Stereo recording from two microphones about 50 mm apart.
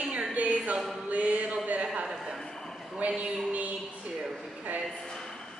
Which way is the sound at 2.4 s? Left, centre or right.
Centre.